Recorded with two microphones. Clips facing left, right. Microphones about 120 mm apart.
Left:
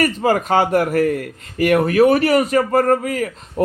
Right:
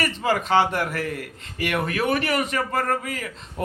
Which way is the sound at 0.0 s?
45° left (ahead or behind).